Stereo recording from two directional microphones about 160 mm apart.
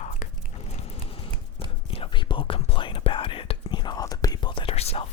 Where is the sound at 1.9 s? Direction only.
30° left (ahead or behind).